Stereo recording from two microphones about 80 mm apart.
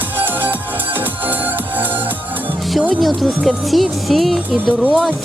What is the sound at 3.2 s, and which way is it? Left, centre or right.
Speech, centre.